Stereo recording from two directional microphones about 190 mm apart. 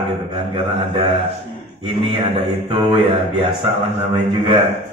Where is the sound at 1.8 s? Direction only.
25° right (ahead or behind).